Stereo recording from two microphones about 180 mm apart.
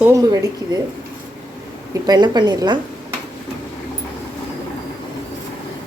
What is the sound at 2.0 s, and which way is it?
Speech, 20° right (ahead or behind).